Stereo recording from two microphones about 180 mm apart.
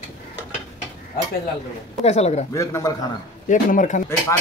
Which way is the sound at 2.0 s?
35° left (ahead or behind).